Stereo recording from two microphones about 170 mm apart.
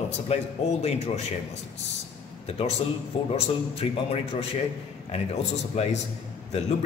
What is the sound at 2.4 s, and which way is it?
Speech, 35° left (ahead or behind).